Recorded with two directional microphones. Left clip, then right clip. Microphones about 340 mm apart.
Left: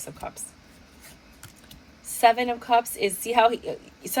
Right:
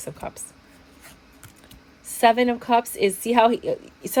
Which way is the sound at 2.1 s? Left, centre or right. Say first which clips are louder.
Right 2 dB; right.